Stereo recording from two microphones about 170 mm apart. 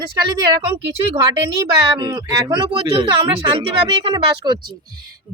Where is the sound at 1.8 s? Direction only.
25° right (ahead or behind).